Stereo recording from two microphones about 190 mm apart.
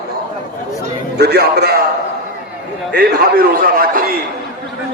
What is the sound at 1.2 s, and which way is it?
Speech, 60° right (ahead or behind).